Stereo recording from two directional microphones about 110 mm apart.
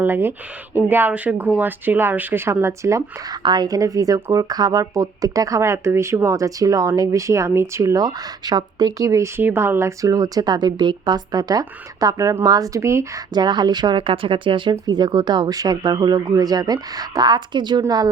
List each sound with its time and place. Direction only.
0.0 s speech: 20° right (ahead or behind)
3.4 s speech: 40° right (ahead or behind); by 13.2 s 25° right (ahead or behind)
13.3 s speech: 40° right (ahead or behind)